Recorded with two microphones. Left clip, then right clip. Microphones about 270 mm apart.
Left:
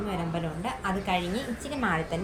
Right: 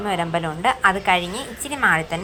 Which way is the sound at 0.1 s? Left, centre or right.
Right.